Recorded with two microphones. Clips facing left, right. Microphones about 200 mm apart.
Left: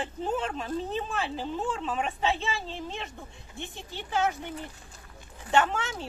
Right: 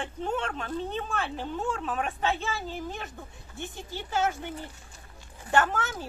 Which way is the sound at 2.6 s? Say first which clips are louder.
Right 1 dB; 30° left (ahead or behind).